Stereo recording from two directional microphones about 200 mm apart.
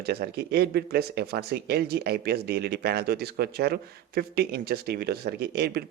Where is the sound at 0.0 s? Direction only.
55° right (ahead or behind).